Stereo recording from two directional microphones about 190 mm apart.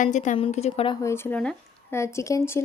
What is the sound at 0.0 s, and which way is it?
Speech, 40° left (ahead or behind).